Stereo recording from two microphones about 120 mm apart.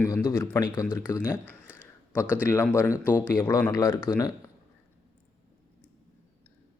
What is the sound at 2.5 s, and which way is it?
Speech, 20° left (ahead or behind).